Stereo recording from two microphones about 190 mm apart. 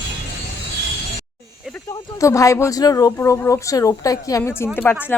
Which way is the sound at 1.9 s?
15° left (ahead or behind).